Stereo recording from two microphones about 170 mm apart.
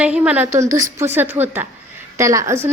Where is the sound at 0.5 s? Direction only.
20° right (ahead or behind).